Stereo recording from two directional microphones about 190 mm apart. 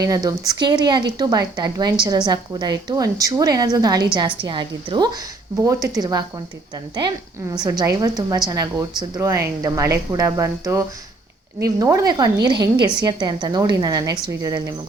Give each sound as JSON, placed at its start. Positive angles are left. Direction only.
{"t": 0.0, "sound": "speech", "side_deg": -20}
{"t": 7.6, "sound": "speech", "side_deg": -20}